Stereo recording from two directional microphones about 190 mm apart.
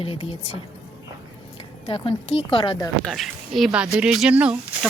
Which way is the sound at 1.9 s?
30° left (ahead or behind).